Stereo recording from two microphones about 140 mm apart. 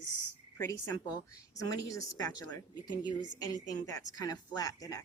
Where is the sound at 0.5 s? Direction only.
20° left (ahead or behind).